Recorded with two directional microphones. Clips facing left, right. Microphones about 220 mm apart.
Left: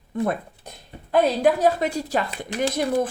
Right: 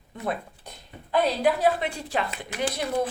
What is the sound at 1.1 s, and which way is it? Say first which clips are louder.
A woman's voice: left 4 dB; 45° left (ahead or behind).